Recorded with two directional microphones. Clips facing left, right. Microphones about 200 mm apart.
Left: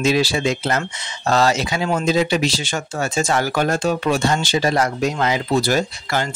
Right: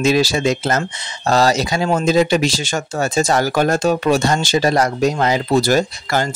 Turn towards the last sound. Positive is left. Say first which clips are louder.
# right 3 dB
turn(degrees=-40)  # may be behind; listen again after turning